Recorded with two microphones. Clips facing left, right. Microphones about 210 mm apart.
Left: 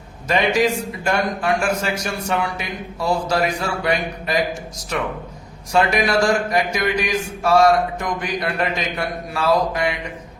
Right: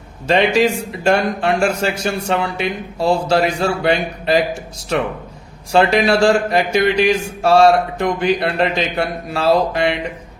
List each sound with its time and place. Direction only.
0.3 s speech: 30° right (ahead or behind)
5.7 s speech: 30° right (ahead or behind)